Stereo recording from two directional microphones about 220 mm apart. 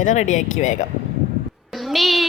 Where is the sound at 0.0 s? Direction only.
35° left (ahead or behind).